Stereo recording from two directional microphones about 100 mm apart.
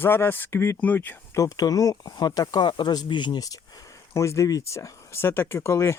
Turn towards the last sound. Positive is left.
turn(degrees=30)  # may be behind; listen again after turning